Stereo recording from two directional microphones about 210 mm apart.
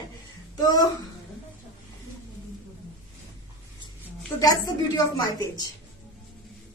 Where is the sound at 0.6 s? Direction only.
20° left (ahead or behind).